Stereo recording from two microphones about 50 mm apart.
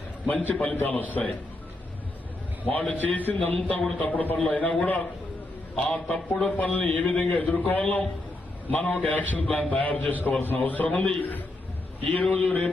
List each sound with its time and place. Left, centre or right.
0.3 s a man's voice: left
2.6 s a man's voice: left